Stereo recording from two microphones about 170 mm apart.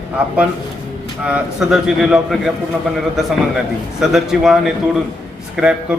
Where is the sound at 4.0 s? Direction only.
Centre (ahead or behind).